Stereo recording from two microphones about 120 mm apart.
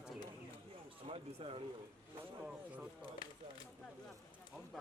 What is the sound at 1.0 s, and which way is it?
Speech, 50° right (ahead or behind).